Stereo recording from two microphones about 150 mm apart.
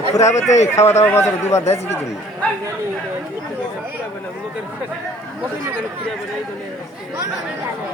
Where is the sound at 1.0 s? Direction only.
15° left (ahead or behind).